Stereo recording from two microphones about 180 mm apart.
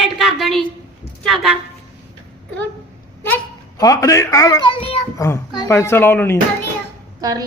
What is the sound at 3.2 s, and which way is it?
Speech, 15° left (ahead or behind).